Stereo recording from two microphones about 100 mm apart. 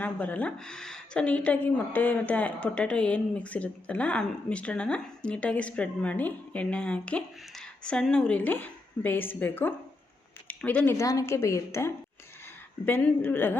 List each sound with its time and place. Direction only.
0.0 s a woman's voice: 15° left (ahead or behind)
10.9 s a woman's voice: 35° left (ahead or behind)
12.8 s a woman's voice: 15° left (ahead or behind)